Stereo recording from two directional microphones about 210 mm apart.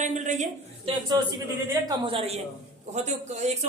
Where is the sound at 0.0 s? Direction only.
35° right (ahead or behind).